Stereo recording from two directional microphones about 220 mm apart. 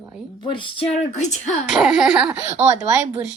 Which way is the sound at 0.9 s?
35° left (ahead or behind).